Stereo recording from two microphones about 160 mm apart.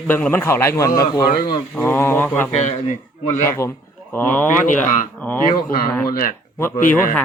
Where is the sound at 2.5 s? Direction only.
45° left (ahead or behind).